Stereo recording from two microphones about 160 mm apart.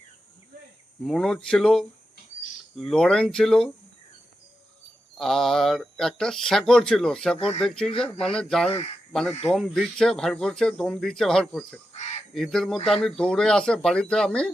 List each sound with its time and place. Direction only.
1.0 s speech: centre (ahead or behind)
5.1 s speech: centre (ahead or behind)
7.3 s speech: 35° left (ahead or behind)
7.6 s speech: 5° left (ahead or behind)
9.3 s speech: 40° left (ahead or behind)
9.6 s speech: centre (ahead or behind)